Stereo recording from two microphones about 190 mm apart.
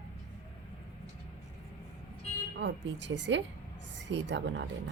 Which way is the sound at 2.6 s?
70° right (ahead or behind).